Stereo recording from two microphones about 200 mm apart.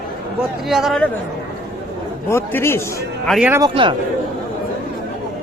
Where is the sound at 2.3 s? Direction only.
10° left (ahead or behind).